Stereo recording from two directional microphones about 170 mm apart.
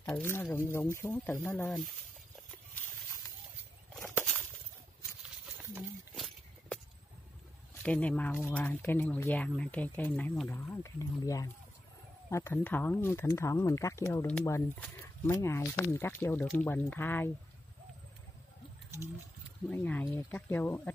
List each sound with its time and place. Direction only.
0.0 s speech: 10° left (ahead or behind)
4.0 s a sound: 5° left (ahead or behind)
5.6 s a sound: centre (ahead or behind)
7.8 s speech: 5° left (ahead or behind)
10.7 s speech: 20° left (ahead or behind)
19.7 s speech: 10° left (ahead or behind)